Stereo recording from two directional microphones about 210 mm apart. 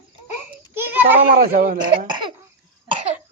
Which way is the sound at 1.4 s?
45° right (ahead or behind).